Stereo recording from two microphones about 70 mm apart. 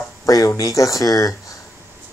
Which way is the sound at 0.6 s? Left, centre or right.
Left.